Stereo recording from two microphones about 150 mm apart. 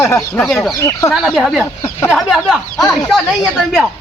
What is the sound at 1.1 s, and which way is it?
Speech, centre (ahead or behind).